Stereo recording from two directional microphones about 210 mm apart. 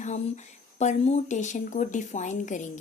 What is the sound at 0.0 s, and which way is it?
Speech, 35° left (ahead or behind).